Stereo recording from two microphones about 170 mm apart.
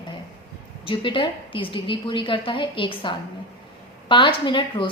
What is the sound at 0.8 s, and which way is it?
A woman's voice, 30° left (ahead or behind).